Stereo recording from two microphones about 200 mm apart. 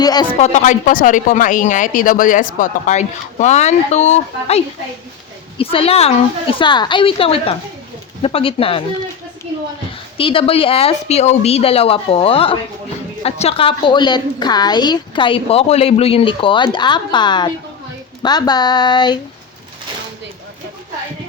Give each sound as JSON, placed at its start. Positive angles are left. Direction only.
{"t": 0.0, "sound": "a woman's voice", "side_deg": 20}
{"t": 0.3, "sound": "a woman's voice", "side_deg": 35}
{"t": 10.2, "sound": "a woman's voice", "side_deg": 25}